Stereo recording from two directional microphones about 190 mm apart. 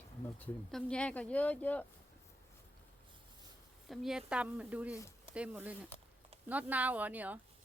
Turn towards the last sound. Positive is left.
turn(degrees=-10)  # may be behind; listen again after turning